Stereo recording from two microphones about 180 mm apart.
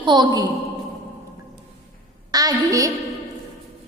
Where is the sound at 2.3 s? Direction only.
20° right (ahead or behind).